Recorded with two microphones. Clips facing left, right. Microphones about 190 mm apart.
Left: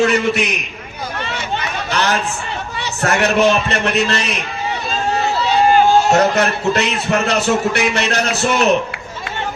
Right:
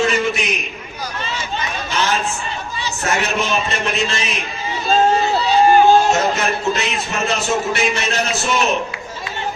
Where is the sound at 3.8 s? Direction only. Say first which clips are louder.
Left 4 dB; 65° left (ahead or behind).